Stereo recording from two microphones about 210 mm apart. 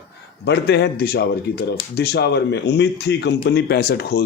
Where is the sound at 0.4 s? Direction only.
55° left (ahead or behind).